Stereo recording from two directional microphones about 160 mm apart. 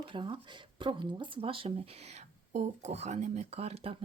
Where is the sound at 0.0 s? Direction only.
30° right (ahead or behind).